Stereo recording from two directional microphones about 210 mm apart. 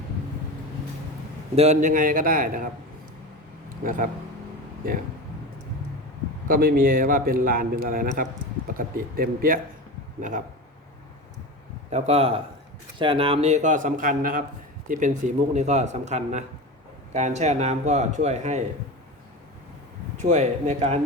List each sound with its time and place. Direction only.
1.5 s speech: 35° right (ahead or behind)
3.8 s speech: 40° right (ahead or behind)
6.5 s a man's voice: 45° right (ahead or behind)
11.9 s speech: 30° right (ahead or behind)
20.1 s speech: 35° right (ahead or behind)